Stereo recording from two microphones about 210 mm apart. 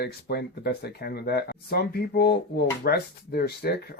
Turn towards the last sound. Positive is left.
turn(degrees=50)  # may be behind; listen again after turning